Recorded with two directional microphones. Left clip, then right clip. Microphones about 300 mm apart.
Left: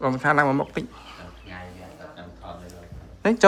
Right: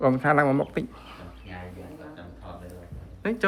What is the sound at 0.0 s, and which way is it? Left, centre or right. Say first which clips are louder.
Speech: left 1 dB; centre.